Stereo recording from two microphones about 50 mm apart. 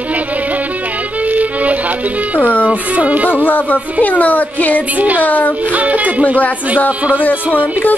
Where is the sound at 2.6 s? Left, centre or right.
Right.